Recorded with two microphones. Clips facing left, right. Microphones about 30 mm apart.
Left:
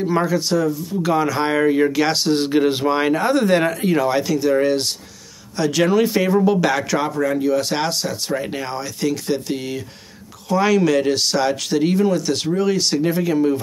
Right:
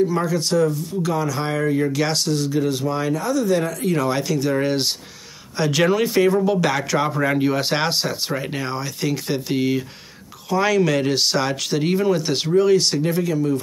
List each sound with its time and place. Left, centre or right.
0.2 s speech: centre
1.0 s speech: left
1.9 s speech: centre
2.3 s speech: left
3.7 s speech: centre
4.1 s speech: centre
7.2 s speech: right
8.4 s speech: centre
10.5 s speech: centre
12.5 s speech: centre
13.3 s speech: left